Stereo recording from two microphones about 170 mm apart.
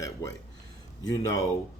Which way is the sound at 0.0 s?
20° left (ahead or behind).